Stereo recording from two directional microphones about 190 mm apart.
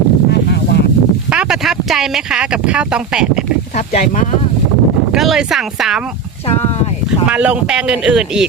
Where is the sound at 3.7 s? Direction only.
40° left (ahead or behind).